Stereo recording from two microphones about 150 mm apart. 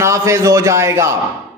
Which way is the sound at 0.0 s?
20° right (ahead or behind).